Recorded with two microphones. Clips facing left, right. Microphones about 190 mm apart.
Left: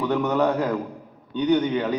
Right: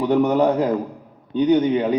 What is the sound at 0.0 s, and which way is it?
Speech, 15° right (ahead or behind).